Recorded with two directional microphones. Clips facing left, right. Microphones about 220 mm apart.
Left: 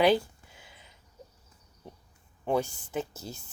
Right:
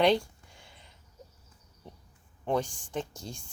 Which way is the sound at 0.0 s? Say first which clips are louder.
Left 1 dB; 5° left (ahead or behind).